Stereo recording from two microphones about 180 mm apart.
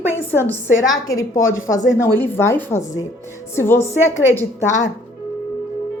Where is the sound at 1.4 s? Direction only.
90° left.